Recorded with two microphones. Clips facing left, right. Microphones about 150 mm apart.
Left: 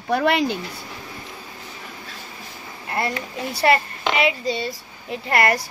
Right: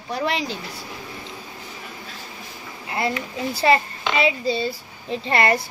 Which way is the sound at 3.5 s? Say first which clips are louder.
Even; 25° right (ahead or behind).